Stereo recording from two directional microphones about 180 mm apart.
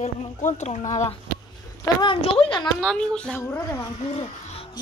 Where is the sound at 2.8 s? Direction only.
5° left (ahead or behind).